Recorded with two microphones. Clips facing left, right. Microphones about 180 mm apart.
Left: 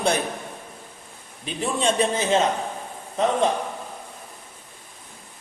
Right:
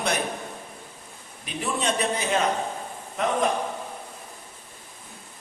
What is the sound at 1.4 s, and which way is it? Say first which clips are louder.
A man's voice: left 4 dB; 30° left (ahead or behind).